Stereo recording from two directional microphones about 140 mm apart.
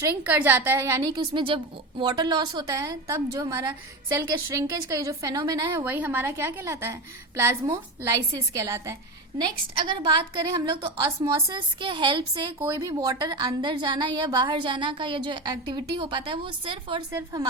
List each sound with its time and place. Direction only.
0.0 s a woman's voice: 10° right (ahead or behind)
1.2 s a woman's voice: 35° right (ahead or behind)
5.8 s a woman's voice: 10° right (ahead or behind)
9.4 s a woman's voice: 35° right (ahead or behind)
12.5 s a woman's voice: 20° right (ahead or behind); by 17.0 s 35° right (ahead or behind)
17.1 s a woman's voice: 20° right (ahead or behind)